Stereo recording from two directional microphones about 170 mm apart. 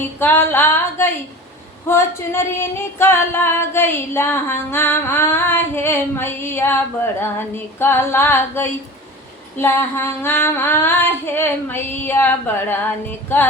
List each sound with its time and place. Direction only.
0.2 s singing: 10° left (ahead or behind)